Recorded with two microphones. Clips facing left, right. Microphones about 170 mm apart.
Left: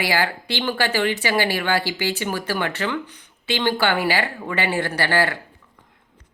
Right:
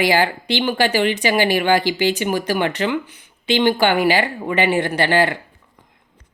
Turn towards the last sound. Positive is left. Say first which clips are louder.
# right 4 dB
turn(degrees=-20)  # may be behind; listen again after turning